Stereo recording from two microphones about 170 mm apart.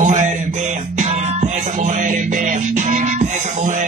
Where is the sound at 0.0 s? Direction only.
45° right (ahead or behind).